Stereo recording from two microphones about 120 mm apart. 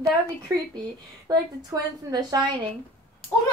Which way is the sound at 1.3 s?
35° right (ahead or behind).